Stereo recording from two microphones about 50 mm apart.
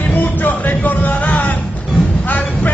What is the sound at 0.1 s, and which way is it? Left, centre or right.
Music, left.